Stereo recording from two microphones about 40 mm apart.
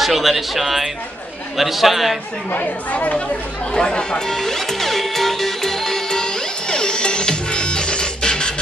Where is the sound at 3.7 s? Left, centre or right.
Left.